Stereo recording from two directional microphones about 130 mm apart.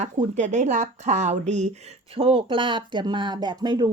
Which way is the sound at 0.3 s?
65° right (ahead or behind).